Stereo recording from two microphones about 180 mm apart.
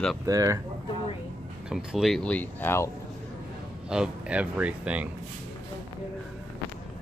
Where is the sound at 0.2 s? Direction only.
20° right (ahead or behind).